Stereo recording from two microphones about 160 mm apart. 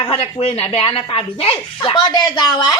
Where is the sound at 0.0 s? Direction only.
35° left (ahead or behind).